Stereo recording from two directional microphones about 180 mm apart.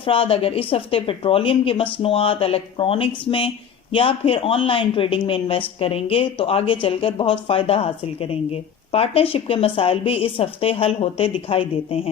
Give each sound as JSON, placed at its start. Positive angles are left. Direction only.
{"t": 0.0, "sound": "speech", "side_deg": 30}